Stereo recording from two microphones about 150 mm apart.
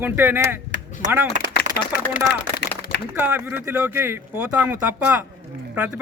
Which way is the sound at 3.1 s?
15° right (ahead or behind).